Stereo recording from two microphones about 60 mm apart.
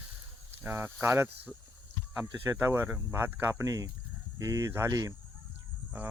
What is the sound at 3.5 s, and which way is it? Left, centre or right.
Speech, right.